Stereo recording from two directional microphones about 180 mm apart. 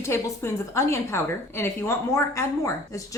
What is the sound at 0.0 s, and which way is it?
Speech, 15° left (ahead or behind).